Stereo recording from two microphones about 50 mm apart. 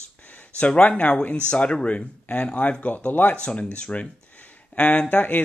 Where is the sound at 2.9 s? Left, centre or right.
Left.